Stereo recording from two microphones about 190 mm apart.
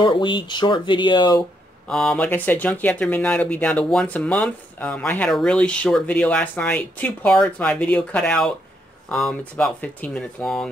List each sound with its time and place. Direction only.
0.0 s speech: 25° left (ahead or behind)
1.9 s speech: 5° left (ahead or behind)